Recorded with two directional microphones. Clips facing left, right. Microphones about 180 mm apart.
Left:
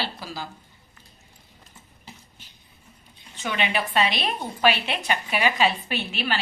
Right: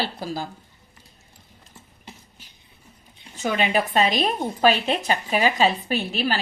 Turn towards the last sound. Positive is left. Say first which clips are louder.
# right 4 dB
turn(degrees=-40)  # may be behind; listen again after turning